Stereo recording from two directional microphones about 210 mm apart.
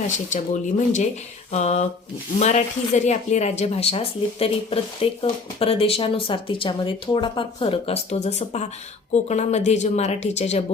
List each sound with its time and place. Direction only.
0.3 s speech: 35° left (ahead or behind)